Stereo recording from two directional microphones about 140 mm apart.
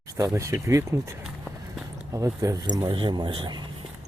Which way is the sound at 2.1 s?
25° right (ahead or behind).